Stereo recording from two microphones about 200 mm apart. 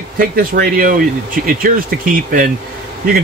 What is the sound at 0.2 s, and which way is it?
Speech, 45° right (ahead or behind).